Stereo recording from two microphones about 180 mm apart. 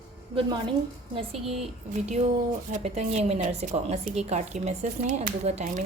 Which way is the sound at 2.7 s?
35° right (ahead or behind).